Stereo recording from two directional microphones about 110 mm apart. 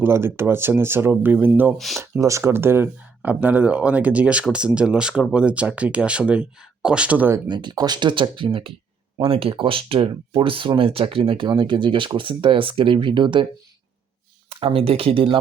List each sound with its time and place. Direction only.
0.0 s speech: 20° right (ahead or behind)
7.3 s speech: 40° right (ahead or behind)
14.6 s speech: 60° right (ahead or behind)